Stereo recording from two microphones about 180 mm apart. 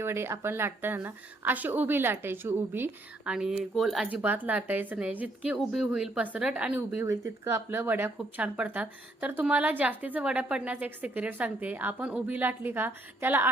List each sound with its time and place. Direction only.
0.0 s a woman's voice: 15° right (ahead or behind)